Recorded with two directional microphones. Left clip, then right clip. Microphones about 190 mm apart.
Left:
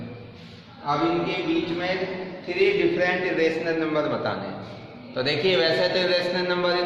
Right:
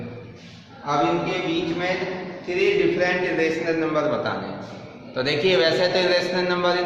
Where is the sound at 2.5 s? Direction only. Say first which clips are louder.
Right 1 dB; 5° left (ahead or behind).